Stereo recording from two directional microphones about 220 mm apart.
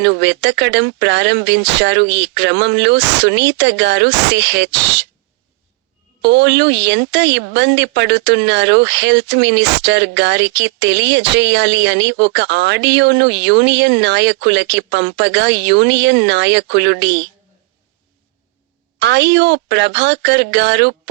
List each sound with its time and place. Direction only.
0.0 s speech: 55° right (ahead or behind)
6.2 s speech: 55° right (ahead or behind)
18.9 s speech: 55° right (ahead or behind)